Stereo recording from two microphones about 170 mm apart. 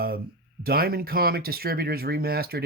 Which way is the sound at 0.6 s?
60° right (ahead or behind).